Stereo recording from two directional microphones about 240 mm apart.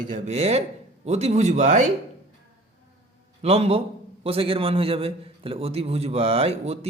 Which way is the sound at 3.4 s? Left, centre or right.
Right.